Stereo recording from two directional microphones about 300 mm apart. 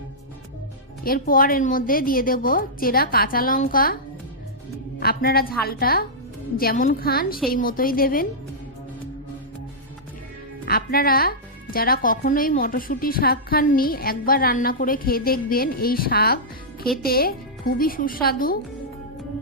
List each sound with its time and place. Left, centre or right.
1.0 s speech: left
4.9 s speech: left
10.7 s speech: left